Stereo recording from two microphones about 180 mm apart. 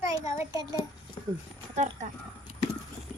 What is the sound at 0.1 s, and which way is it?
Speech, 20° right (ahead or behind).